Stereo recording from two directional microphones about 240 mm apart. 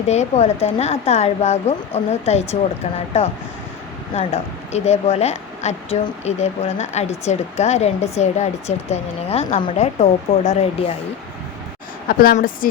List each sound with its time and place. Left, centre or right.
0.1 s a woman's voice: left
12.0 s a woman's voice: left